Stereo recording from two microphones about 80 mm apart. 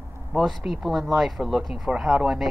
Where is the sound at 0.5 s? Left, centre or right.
Centre.